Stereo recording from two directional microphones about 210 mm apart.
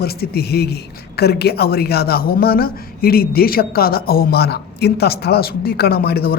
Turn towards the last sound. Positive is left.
turn(degrees=50)  # may be behind; listen again after turning